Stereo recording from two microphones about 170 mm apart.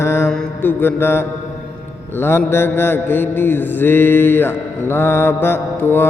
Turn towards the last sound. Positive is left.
turn(degrees=15)  # may be behind; listen again after turning